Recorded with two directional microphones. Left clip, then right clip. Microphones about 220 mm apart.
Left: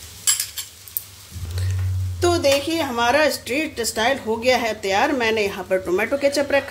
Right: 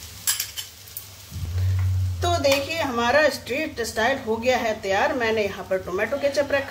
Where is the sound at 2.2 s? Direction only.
40° left (ahead or behind).